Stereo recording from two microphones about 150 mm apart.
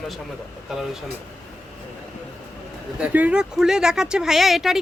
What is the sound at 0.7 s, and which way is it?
Speech, 5° right (ahead or behind).